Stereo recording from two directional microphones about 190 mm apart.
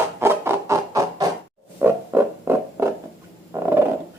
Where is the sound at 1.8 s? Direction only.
10° right (ahead or behind).